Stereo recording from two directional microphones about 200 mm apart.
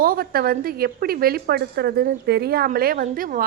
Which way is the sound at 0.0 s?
45° right (ahead or behind).